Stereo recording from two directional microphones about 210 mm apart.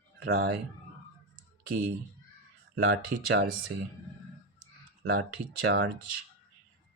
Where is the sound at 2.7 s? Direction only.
50° right (ahead or behind).